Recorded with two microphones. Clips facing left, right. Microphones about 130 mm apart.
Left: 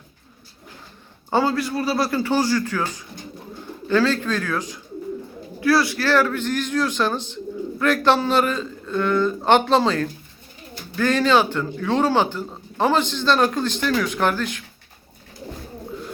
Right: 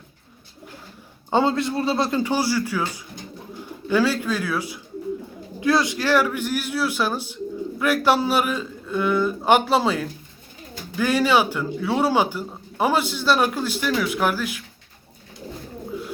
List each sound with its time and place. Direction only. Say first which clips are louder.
1.3 s a man's voice: even; 20° right (ahead or behind); by 14.6 s 5° right (ahead or behind)